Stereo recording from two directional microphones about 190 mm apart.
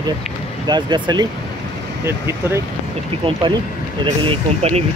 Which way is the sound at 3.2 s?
25° right (ahead or behind).